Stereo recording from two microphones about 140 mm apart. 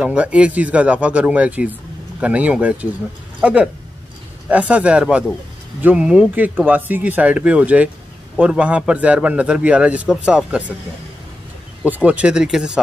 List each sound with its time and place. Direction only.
0.0 s speech: 10° right (ahead or behind)
11.8 s speech: 10° right (ahead or behind)